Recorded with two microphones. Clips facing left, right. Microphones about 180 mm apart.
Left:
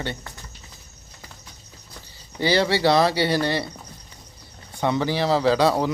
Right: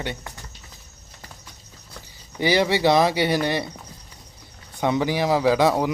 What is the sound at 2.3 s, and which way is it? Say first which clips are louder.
Speech: right 1 dB; 15° right (ahead or behind).